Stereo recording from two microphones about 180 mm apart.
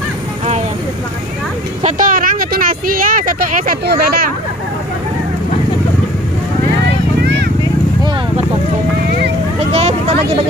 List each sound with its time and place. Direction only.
1.8 s speech: 45° right (ahead or behind)
9.7 s vehicle: 35° right (ahead or behind)